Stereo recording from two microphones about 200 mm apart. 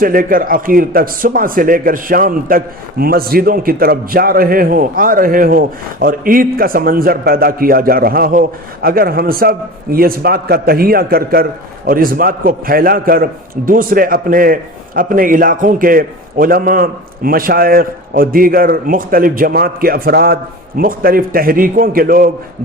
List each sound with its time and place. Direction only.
0.0 s a man's voice: 45° right (ahead or behind)